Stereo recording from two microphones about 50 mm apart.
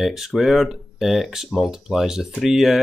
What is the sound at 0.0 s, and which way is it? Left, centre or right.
Speech, centre.